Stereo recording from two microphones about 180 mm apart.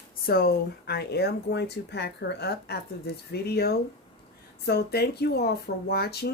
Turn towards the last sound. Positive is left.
turn(degrees=60)  # may be behind; listen again after turning